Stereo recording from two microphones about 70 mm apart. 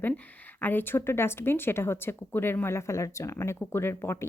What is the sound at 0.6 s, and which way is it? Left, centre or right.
Speech, left.